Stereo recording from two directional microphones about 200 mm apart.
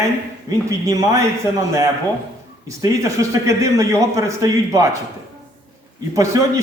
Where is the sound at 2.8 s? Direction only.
15° right (ahead or behind).